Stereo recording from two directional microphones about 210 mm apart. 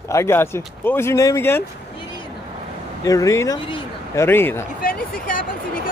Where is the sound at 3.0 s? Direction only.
15° left (ahead or behind).